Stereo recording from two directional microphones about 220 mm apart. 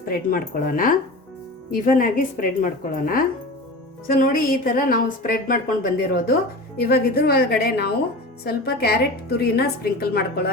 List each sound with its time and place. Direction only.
0.0 s a woman's voice: 40° left (ahead or behind)